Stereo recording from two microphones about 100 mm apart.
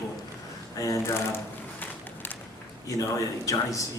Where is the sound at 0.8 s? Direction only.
35° left (ahead or behind).